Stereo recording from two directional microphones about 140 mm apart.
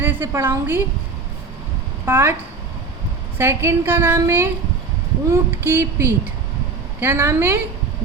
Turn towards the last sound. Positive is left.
turn(degrees=-20)  # may be behind; listen again after turning